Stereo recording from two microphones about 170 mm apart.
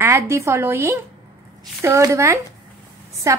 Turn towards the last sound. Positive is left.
turn(degrees=-20)  # may be behind; listen again after turning